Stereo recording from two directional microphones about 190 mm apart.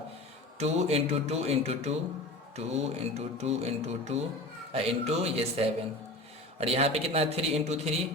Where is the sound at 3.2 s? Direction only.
35° right (ahead or behind).